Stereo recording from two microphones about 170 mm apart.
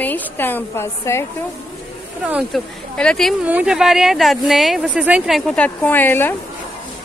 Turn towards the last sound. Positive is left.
turn(degrees=10)  # may be behind; listen again after turning